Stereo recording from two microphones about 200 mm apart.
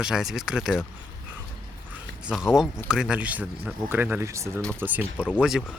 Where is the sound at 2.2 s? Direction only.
5° right (ahead or behind).